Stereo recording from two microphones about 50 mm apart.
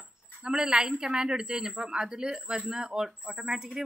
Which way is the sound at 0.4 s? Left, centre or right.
Centre.